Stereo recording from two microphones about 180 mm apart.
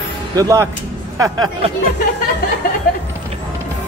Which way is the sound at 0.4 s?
15° right (ahead or behind).